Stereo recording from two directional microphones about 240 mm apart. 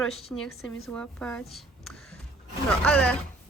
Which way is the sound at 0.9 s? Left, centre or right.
Centre.